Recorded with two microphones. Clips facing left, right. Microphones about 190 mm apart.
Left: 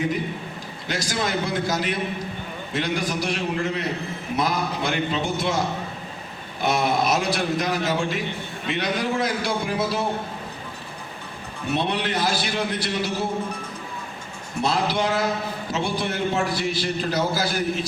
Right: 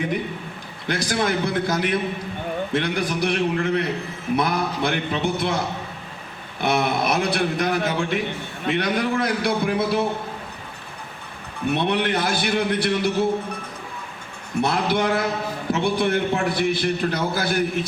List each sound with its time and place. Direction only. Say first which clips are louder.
0.9 s a man's voice: right 4 dB; 55° right (ahead or behind)
6.6 s a man's voice: even; 60° right (ahead or behind)
11.7 s a man's voice: right 2 dB; 60° right (ahead or behind)
14.6 s a man's voice: right 2 dB; 60° right (ahead or behind)